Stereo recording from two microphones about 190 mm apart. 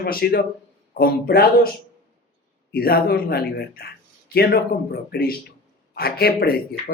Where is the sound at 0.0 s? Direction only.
55° left (ahead or behind).